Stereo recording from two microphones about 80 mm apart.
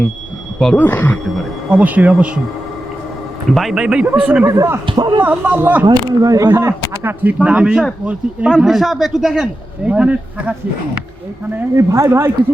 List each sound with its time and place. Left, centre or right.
0.8 s speech: left
1.7 s speech: centre
3.5 s speech: centre
4.4 s speech: right
4.9 s speech: right
5.2 s speech: right
5.8 s speech: right
6.5 s speech: right
7.3 s speech: centre
8.5 s speech: centre
9.8 s speech: centre
11.8 s speech: right